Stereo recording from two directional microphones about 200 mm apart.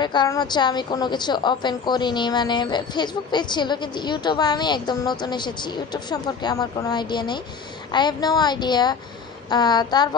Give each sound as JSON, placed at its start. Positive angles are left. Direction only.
{"t": 0.0, "sound": "a woman's voice", "side_deg": 20}